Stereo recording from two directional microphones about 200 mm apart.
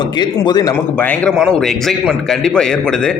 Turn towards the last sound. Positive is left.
turn(degrees=5)  # may be behind; listen again after turning